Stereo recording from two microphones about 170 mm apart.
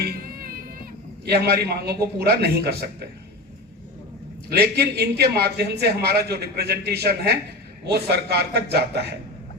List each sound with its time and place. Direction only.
0.0 s music: 65° right (ahead or behind)
1.2 s a man's voice: 70° right (ahead or behind)
4.4 s a man's voice: 70° right (ahead or behind)